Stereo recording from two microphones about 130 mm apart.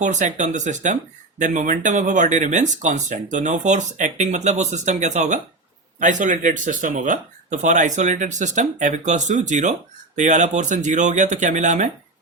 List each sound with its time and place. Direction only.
0.0 s speech: 70° right (ahead or behind)